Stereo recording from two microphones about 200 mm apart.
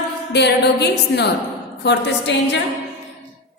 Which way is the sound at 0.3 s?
55° left (ahead or behind).